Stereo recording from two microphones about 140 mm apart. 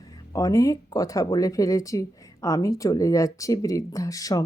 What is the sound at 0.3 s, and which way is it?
Speech, 25° left (ahead or behind).